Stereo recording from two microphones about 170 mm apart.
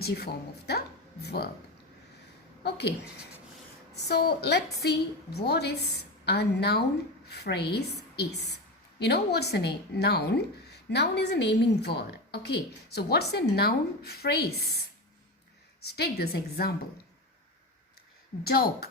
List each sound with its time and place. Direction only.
0.0 s a woman's voice: 70° left (ahead or behind)
0.7 s a sound: 70° left (ahead or behind)
2.6 s a woman's voice: 80° left
4.1 s a woman's voice: 70° left (ahead or behind)
15.8 s a woman's voice: 70° left (ahead or behind)
18.4 s a woman's voice: 65° left (ahead or behind)